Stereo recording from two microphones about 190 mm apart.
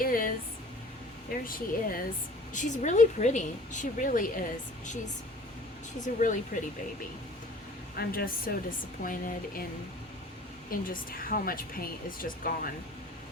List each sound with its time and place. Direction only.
0.0 s a sound: 50° left (ahead or behind)
1.5 s a woman's voice: 50° left (ahead or behind)
6.0 s a woman's voice: 40° left (ahead or behind)
7.9 s a woman's voice: 50° left (ahead or behind)
10.7 s a woman's voice: 50° left (ahead or behind)